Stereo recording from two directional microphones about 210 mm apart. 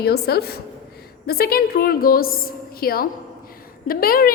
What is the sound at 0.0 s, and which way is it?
A woman's voice, 50° left (ahead or behind).